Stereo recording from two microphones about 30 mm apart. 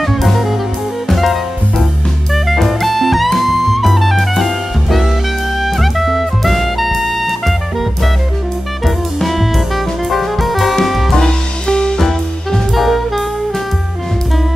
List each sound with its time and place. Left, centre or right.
0.0 s music: centre
2.3 s jazz: centre
5.6 s music: centre
8.8 s music: centre
11.1 s music: left
12.0 s music: centre